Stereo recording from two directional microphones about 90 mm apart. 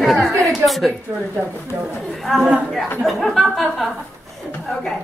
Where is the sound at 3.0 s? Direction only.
Centre (ahead or behind).